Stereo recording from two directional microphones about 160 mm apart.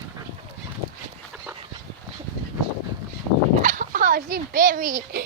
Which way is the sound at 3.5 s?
55° right (ahead or behind).